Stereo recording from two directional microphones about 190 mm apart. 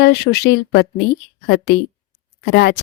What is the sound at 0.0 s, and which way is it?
Speech, 60° left (ahead or behind).